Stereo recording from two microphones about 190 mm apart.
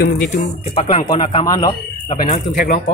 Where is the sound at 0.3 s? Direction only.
30° left (ahead or behind).